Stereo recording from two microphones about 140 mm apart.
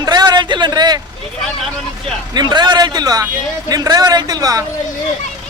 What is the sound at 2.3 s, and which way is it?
Speech, 30° right (ahead or behind).